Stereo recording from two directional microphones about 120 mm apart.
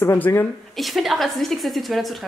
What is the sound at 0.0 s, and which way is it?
Speech, 20° left (ahead or behind).